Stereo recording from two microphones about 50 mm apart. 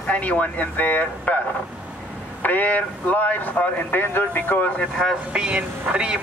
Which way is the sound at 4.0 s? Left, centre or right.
Left.